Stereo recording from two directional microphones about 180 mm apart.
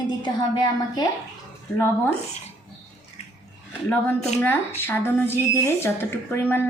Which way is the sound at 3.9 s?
10° left (ahead or behind).